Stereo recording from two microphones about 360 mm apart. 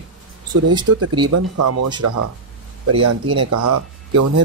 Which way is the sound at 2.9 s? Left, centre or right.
Right.